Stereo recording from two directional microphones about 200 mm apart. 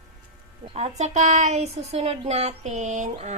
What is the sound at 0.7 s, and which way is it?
A woman's voice, 30° right (ahead or behind).